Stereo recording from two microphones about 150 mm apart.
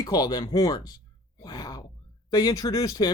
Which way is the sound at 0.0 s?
25° left (ahead or behind).